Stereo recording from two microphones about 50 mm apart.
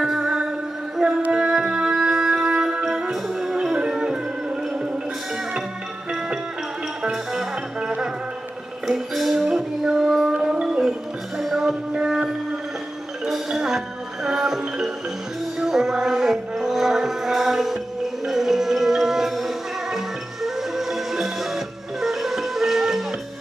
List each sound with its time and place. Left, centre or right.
0.0 s music: centre
7.8 s music: centre
8.9 s music: centre